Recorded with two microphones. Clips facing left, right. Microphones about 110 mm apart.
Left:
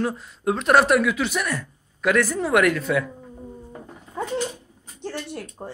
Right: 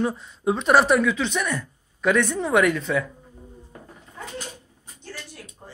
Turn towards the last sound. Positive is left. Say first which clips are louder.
# left 9 dB
turn(degrees=65)  # may be behind; listen again after turning